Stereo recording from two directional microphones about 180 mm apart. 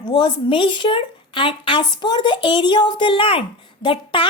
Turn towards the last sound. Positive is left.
turn(degrees=30)  # may be behind; listen again after turning